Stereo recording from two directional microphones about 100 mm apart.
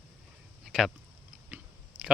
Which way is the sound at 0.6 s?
5° right (ahead or behind).